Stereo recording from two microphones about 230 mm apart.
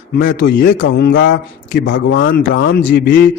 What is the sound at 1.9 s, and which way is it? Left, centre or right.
Speech, left.